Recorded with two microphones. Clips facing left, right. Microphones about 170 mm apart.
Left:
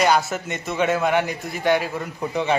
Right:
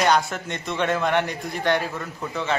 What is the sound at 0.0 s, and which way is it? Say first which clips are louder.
A man's voice: left 1 dB; 5° left (ahead or behind).